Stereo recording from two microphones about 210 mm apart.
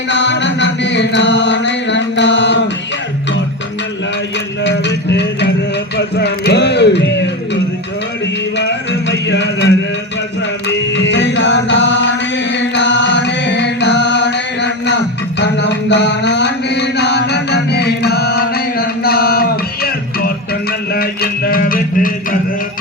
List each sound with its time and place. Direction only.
0.1 s music: 60° left (ahead or behind)
4.6 s music: 55° left (ahead or behind)
10.9 s music: 60° left (ahead or behind); by 22.4 s 40° left (ahead or behind)